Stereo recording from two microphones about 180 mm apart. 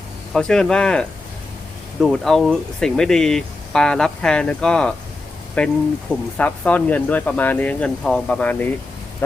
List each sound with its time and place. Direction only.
0.3 s speech: 5° left (ahead or behind)